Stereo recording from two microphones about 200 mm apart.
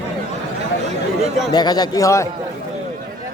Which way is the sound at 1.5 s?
20° left (ahead or behind).